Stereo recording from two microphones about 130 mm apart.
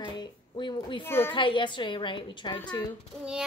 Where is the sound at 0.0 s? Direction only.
35° left (ahead or behind).